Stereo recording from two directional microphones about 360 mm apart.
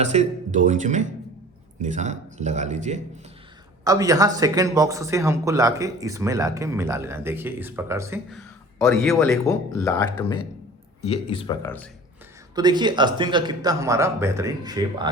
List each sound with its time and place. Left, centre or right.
0.0 s speech: centre
12.5 s speech: centre